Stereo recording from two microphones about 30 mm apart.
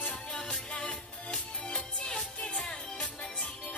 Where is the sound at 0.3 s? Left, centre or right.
Left.